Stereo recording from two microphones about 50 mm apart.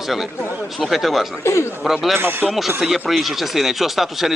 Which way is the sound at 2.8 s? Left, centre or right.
Centre.